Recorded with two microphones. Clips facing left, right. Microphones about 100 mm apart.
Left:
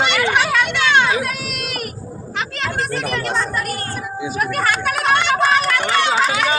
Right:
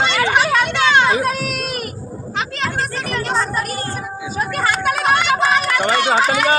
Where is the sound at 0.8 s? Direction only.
30° right (ahead or behind).